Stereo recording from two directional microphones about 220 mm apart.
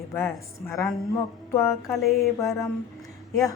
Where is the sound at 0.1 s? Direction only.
10° left (ahead or behind).